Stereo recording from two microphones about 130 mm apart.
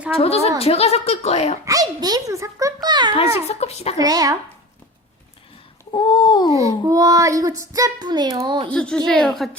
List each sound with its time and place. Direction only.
0.2 s speech: 50° left (ahead or behind)
1.6 s a child's voice: 30° right (ahead or behind)
3.4 s a woman's voice: 55° left (ahead or behind)
3.9 s a child's voice: 30° right (ahead or behind)
5.9 s babbling: 35° left (ahead or behind)
6.5 s a child's voice: 25° right (ahead or behind)
8.7 s a woman's voice: 10° left (ahead or behind)